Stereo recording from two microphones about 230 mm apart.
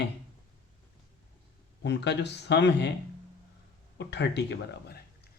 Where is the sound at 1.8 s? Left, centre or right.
Left.